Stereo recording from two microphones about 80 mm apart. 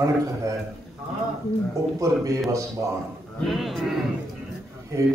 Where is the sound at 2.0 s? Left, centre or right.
Right.